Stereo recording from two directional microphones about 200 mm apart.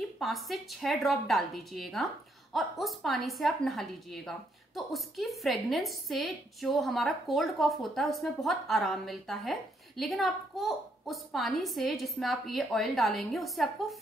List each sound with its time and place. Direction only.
0.2 s a woman's voice: centre (ahead or behind)